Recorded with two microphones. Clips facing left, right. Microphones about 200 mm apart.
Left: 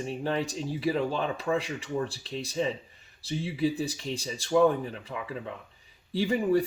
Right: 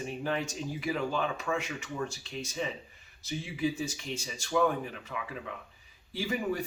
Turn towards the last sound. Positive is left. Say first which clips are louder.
# left 7 dB
turn(degrees=35)  # may be behind; listen again after turning